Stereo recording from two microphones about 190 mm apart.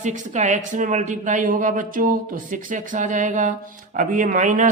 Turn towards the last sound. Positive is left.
turn(degrees=-45)  # may be behind; listen again after turning